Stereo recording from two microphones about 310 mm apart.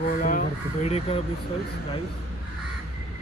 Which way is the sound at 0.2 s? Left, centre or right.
Left.